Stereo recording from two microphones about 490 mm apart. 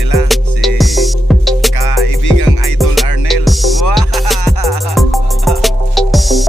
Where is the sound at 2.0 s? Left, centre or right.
Left.